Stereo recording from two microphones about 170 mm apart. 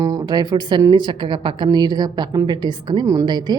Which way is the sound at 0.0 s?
20° right (ahead or behind).